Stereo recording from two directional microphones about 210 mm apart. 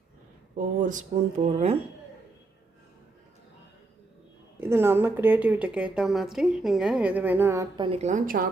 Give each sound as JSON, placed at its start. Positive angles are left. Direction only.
{"t": 0.5, "sound": "speech", "side_deg": -35}
{"t": 4.6, "sound": "a woman's voice", "side_deg": -10}
{"t": 7.9, "sound": "speech", "side_deg": -30}